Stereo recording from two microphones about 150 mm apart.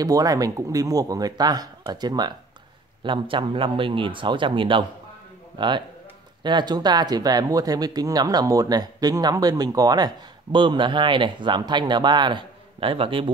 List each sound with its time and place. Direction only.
0.0 s speech: 25° right (ahead or behind)